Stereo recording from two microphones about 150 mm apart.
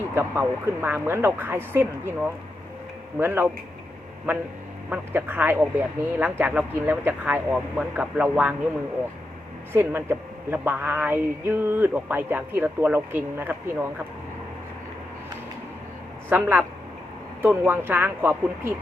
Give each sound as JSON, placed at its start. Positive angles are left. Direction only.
{"t": 0.1, "sound": "speech", "side_deg": -15}
{"t": 9.7, "sound": "speech", "side_deg": -15}
{"t": 16.3, "sound": "speech", "side_deg": -15}